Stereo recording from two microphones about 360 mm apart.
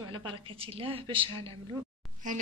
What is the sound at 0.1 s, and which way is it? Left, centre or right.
A woman's voice, centre.